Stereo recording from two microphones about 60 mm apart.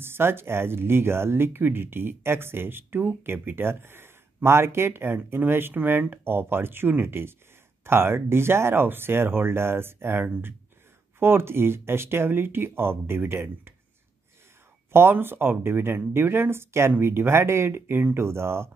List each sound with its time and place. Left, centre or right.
0.0 s speech: right
14.9 s speech: right